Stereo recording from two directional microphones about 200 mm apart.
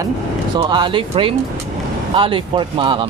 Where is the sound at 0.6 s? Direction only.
25° right (ahead or behind).